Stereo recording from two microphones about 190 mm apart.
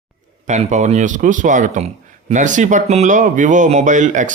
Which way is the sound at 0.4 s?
40° right (ahead or behind).